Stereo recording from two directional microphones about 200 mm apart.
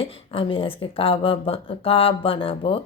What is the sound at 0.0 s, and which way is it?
Speech, 25° left (ahead or behind).